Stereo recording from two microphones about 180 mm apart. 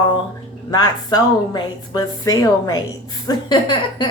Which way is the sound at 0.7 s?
20° left (ahead or behind).